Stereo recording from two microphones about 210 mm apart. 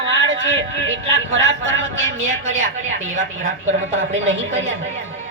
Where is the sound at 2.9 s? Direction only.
65° right (ahead or behind).